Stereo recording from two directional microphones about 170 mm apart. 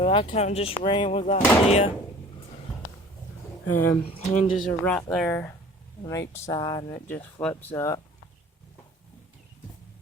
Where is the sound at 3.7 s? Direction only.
10° left (ahead or behind).